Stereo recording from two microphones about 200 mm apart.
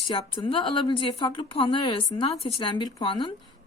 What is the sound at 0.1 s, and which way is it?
A woman's voice, 25° left (ahead or behind).